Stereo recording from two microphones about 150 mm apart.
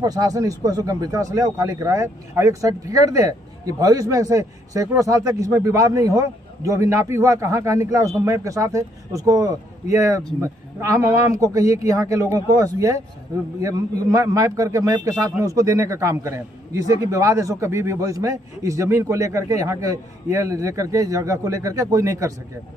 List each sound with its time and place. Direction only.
0.0 s speech: 25° right (ahead or behind)